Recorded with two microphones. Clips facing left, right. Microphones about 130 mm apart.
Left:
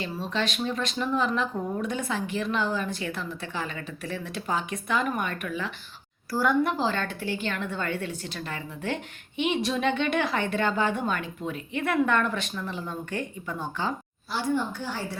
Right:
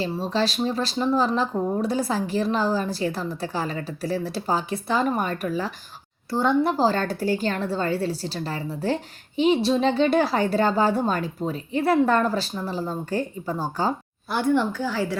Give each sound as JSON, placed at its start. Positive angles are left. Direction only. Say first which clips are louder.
{"t": 0.0, "sound": "a woman's voice", "louder": "right 5 dB", "side_deg": -35}
{"t": 6.3, "sound": "a woman's voice", "louder": "right 3 dB", "side_deg": -25}
{"t": 14.3, "sound": "a woman's voice", "louder": "right 6 dB", "side_deg": -55}